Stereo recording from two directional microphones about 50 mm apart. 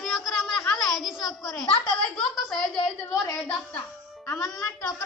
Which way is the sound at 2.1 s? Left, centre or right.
Centre.